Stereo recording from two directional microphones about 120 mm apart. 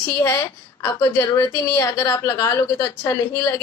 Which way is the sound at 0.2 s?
25° left (ahead or behind).